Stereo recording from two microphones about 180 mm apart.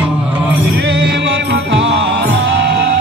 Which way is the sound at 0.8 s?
70° right (ahead or behind).